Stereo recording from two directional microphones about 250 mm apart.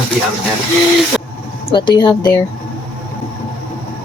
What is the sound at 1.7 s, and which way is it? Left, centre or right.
Speech, centre.